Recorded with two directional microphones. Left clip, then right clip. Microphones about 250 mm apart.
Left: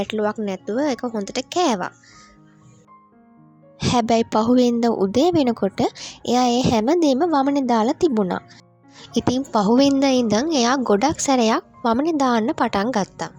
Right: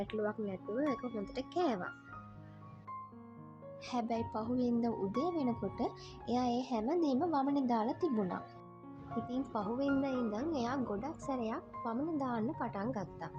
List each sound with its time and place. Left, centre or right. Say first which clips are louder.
0.0 s a woman's voice: left 15 dB; left
3.8 s a woman's voice: left 19 dB; left